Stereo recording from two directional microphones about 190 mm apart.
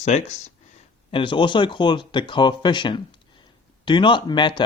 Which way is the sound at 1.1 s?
25° left (ahead or behind).